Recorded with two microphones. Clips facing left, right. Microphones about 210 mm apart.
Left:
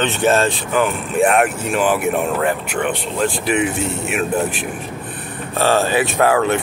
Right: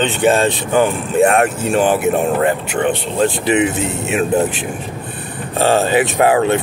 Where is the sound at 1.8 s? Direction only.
25° right (ahead or behind).